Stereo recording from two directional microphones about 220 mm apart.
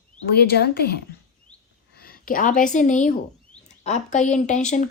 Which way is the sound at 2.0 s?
40° left (ahead or behind).